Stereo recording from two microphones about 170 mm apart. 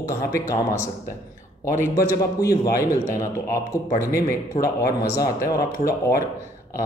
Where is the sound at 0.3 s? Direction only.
20° left (ahead or behind).